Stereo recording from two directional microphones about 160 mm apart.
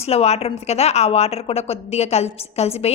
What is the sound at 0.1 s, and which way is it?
A woman's voice, 40° left (ahead or behind).